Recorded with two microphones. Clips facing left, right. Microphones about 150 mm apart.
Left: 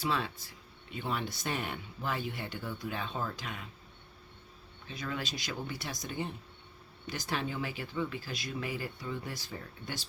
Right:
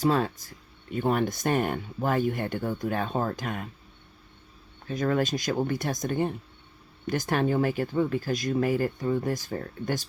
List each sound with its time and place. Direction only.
0.0 s speech: 45° right (ahead or behind)
4.9 s speech: 50° right (ahead or behind)